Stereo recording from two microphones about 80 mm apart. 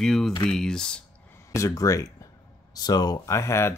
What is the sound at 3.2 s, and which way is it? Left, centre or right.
Speech, left.